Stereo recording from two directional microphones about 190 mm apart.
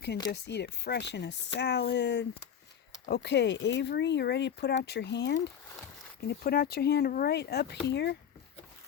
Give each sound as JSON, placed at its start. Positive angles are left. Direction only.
{"t": 0.3, "sound": "speech", "side_deg": 65}
{"t": 6.2, "sound": "speech", "side_deg": 50}